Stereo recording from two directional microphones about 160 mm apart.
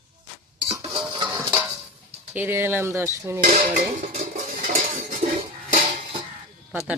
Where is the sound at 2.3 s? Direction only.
15° right (ahead or behind).